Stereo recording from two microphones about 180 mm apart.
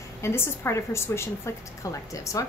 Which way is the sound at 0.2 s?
15° left (ahead or behind).